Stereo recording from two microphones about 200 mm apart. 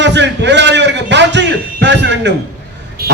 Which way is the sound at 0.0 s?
60° right (ahead or behind).